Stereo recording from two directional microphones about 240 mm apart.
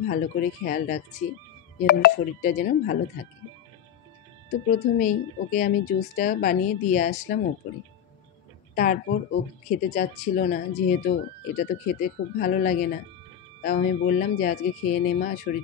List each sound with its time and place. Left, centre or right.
0.0 s speech: left
4.9 s speech: left
8.7 s speech: left